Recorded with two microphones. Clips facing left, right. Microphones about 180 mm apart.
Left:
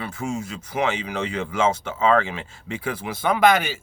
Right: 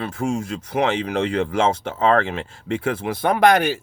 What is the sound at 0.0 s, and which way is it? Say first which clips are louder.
Speech: right 4 dB; 50° right (ahead or behind).